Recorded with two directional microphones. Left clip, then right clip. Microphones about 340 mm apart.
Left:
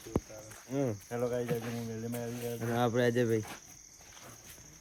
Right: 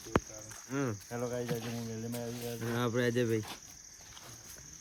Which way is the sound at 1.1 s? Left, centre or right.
Right.